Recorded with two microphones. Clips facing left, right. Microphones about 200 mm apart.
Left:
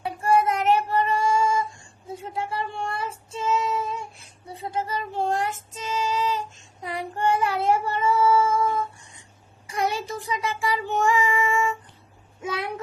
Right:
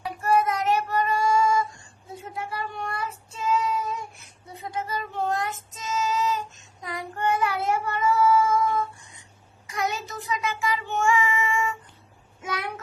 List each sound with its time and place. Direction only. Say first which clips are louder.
0.0 s child singing: left 2 dB; 30° left (ahead or behind)
4.4 s music: left 3 dB; 30° left (ahead or behind)
9.6 s child singing: left 3 dB; 30° left (ahead or behind)
12.4 s a sound: left 2 dB; 25° left (ahead or behind)